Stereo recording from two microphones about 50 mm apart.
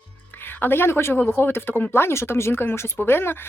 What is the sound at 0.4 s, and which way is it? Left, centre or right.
Speech, left.